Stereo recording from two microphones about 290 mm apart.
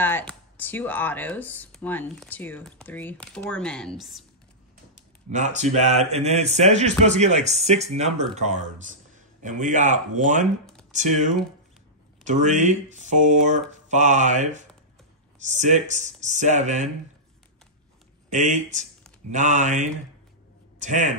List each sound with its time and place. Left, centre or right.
0.0 s speech: centre
5.3 s a man's voice: right
12.3 s a man's voice: right
18.3 s a man's voice: right